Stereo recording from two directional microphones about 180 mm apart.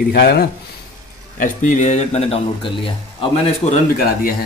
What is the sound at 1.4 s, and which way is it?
Speech, 45° left (ahead or behind).